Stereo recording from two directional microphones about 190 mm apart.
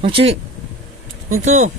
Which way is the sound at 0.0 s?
30° right (ahead or behind).